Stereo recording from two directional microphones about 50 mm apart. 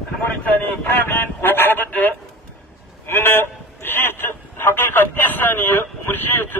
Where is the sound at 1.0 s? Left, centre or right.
Left.